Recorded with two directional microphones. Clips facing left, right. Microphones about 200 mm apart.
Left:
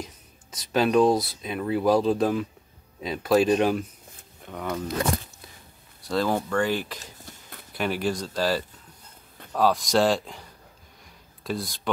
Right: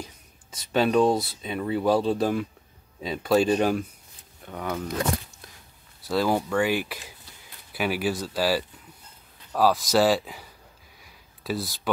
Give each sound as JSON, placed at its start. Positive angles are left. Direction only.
{"t": 0.7, "sound": "speech", "side_deg": 0}
{"t": 6.0, "sound": "speech", "side_deg": -5}
{"t": 7.2, "sound": "a sound", "side_deg": 45}
{"t": 7.7, "sound": "speech", "side_deg": -5}